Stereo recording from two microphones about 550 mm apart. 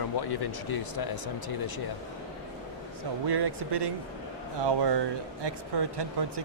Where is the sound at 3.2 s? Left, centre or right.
Right.